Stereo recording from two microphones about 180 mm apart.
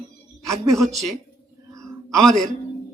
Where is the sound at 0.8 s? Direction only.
Centre (ahead or behind).